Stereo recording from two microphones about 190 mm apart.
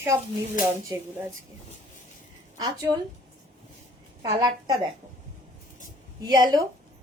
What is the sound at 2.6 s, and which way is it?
Speech, 20° right (ahead or behind).